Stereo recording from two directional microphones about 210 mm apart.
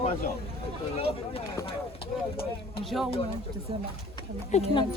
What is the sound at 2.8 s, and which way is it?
Speech, centre (ahead or behind).